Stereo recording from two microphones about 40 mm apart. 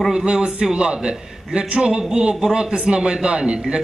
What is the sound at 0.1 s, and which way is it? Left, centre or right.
A man's voice, right.